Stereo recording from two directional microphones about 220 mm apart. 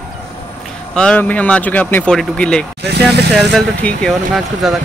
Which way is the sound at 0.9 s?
5° left (ahead or behind).